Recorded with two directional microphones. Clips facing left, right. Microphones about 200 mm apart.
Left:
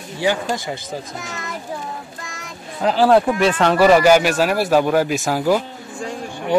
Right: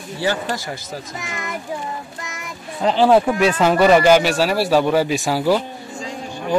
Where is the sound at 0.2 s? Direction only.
15° left (ahead or behind).